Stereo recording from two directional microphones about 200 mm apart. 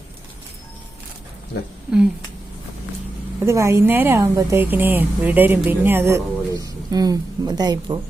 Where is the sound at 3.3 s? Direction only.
15° right (ahead or behind).